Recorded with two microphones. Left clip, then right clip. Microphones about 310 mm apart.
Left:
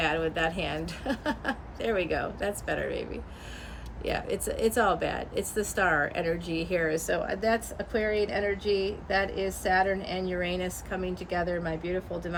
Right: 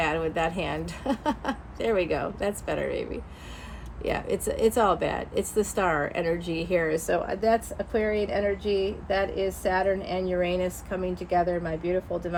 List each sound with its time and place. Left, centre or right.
0.0 s speech: centre